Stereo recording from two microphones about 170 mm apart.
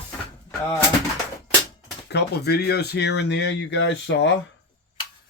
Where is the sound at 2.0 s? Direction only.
75° left (ahead or behind); by 4.3 s 90° left.